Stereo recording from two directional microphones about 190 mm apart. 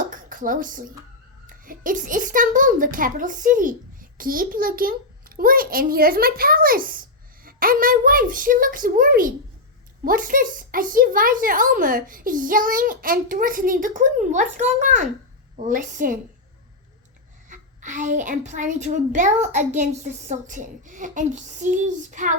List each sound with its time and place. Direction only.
0.1 s a child's voice: 45° right (ahead or behind)
17.5 s a woman's voice: 40° right (ahead or behind)